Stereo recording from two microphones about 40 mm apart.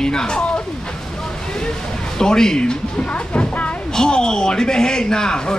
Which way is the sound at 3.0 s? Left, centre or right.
Left.